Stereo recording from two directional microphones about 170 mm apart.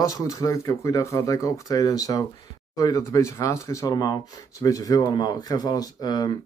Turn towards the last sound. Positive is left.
turn(degrees=20)  # may be behind; listen again after turning